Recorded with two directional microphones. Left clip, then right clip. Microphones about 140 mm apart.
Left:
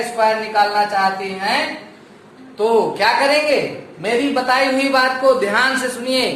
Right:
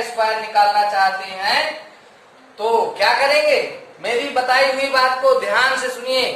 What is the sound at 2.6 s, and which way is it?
A man's voice, 30° left (ahead or behind).